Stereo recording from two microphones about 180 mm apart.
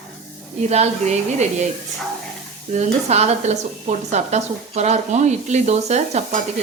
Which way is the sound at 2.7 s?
40° right (ahead or behind).